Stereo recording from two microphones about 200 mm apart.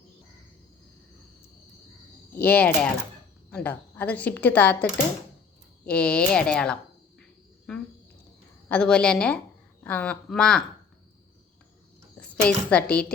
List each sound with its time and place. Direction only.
2.3 s a woman's voice: 10° left (ahead or behind)
7.7 s cricket: 5° left (ahead or behind)
8.7 s speech: 5° left (ahead or behind)
12.5 s speech: 5° left (ahead or behind)